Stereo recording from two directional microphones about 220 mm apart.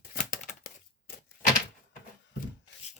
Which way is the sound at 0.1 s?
40° left (ahead or behind).